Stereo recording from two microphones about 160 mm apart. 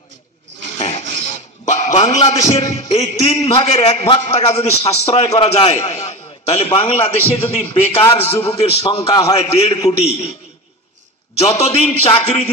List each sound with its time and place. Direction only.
0.7 s a sound: 40° left (ahead or behind)
2.7 s a man's voice: 45° left (ahead or behind)
9.0 s a man's voice: 20° left (ahead or behind)
9.3 s a man's voice: 40° left (ahead or behind)
11.5 s a man's voice: 40° left (ahead or behind)